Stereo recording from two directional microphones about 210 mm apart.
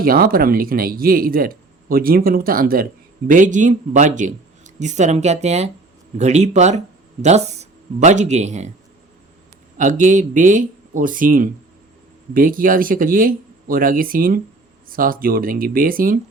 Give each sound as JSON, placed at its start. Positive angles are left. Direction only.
{"t": 0.0, "sound": "speech", "side_deg": -45}
{"t": 9.7, "sound": "speech", "side_deg": -40}